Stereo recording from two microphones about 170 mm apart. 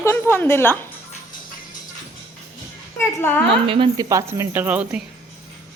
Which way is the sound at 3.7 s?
30° right (ahead or behind).